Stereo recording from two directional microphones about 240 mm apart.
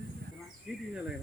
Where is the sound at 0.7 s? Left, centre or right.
Centre.